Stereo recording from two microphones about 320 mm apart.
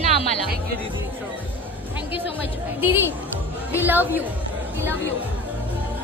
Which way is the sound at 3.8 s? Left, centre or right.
Centre.